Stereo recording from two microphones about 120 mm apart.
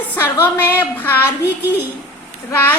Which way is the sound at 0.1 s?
20° left (ahead or behind).